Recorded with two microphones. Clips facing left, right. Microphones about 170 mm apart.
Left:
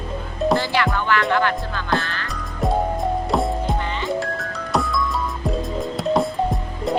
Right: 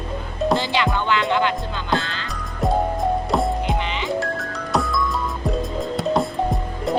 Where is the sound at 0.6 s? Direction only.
20° right (ahead or behind).